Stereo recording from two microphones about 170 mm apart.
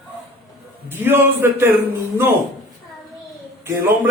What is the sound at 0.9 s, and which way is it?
Speech, 10° right (ahead or behind).